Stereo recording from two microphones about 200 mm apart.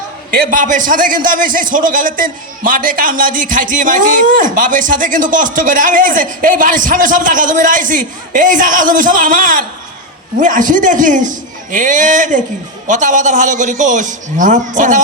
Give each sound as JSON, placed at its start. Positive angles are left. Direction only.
{"t": 0.3, "sound": "a man's voice", "side_deg": -40}